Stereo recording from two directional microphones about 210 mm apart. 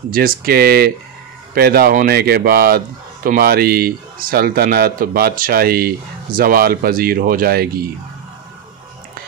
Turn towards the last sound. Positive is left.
turn(degrees=-45)  # may be behind; listen again after turning